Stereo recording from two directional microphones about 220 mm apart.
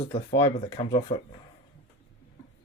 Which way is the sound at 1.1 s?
30° left (ahead or behind).